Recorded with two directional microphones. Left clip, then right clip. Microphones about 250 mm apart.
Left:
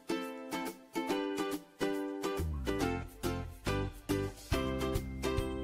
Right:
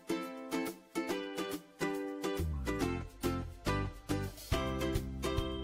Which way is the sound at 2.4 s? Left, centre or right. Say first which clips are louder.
Left 2 dB; centre.